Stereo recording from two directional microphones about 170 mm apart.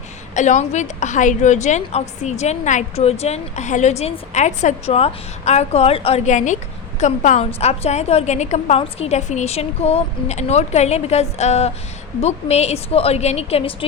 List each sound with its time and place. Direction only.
0.3 s a woman's voice: 45° left (ahead or behind)